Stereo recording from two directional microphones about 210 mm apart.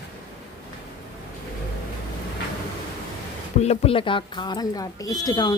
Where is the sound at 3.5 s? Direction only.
30° left (ahead or behind).